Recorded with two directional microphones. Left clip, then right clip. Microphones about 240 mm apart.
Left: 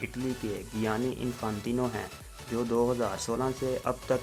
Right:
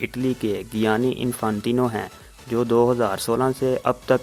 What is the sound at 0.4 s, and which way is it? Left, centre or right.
Speech, right.